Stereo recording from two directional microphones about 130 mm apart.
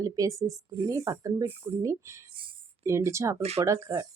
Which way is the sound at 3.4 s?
55° right (ahead or behind).